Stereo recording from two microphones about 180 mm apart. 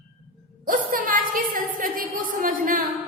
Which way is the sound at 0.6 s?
50° right (ahead or behind).